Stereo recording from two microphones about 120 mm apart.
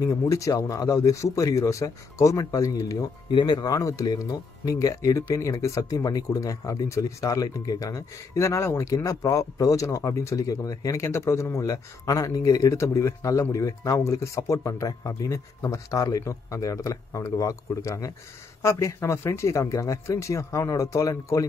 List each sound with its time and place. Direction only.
0.0 s speech: 25° left (ahead or behind)